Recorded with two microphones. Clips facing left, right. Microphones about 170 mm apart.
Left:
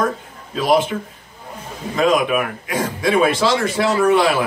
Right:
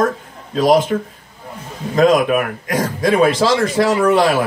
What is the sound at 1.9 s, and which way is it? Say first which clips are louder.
Speech: right 4 dB; 40° right (ahead or behind).